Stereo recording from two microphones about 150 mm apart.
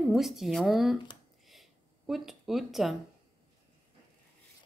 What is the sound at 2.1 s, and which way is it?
Speech, centre (ahead or behind).